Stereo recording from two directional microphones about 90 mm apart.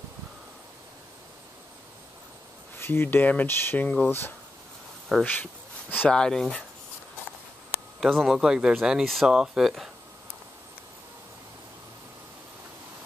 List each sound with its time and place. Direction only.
2.8 s speech: 25° left (ahead or behind)
6.1 s speech: 5° left (ahead or behind)
8.0 s speech: 5° right (ahead or behind)